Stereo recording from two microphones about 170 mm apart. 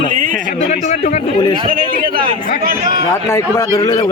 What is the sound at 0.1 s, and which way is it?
Speech, 50° right (ahead or behind).